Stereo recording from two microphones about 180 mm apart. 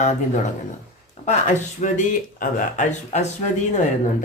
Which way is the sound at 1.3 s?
45° left (ahead or behind).